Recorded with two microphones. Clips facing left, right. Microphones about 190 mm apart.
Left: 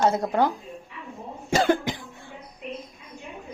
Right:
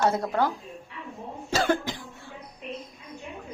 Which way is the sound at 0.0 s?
20° left (ahead or behind).